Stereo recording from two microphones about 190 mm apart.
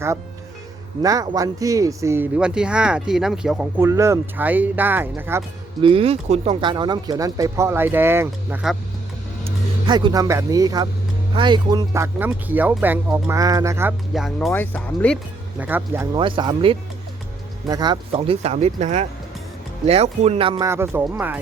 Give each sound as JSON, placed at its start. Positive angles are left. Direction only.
{"t": 1.0, "sound": "speech", "side_deg": -20}
{"t": 5.8, "sound": "speech", "side_deg": -30}
{"t": 9.4, "sound": "speech", "side_deg": -25}
{"t": 14.1, "sound": "speech", "side_deg": 0}
{"t": 15.5, "sound": "speech", "side_deg": -10}
{"t": 16.1, "sound": "speech", "side_deg": -25}
{"t": 20.7, "sound": "speech", "side_deg": -15}